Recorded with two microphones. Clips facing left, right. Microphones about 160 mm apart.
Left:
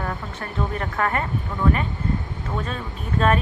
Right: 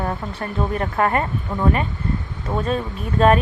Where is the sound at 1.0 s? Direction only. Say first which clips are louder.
Right 4 dB; 35° right (ahead or behind).